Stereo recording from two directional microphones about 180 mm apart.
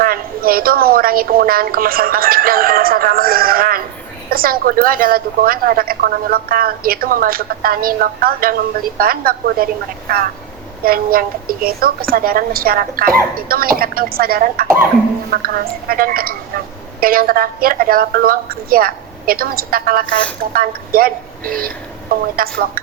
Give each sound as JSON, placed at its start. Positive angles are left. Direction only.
{"t": 0.0, "sound": "a woman's voice", "side_deg": -55}
{"t": 10.8, "sound": "a woman's voice", "side_deg": -55}